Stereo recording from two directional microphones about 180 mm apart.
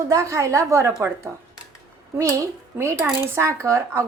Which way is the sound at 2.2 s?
15° right (ahead or behind).